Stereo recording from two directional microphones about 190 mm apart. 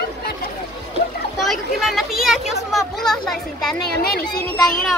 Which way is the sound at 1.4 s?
Centre (ahead or behind).